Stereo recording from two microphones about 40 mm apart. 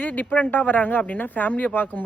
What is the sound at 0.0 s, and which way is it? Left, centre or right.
Speech, left.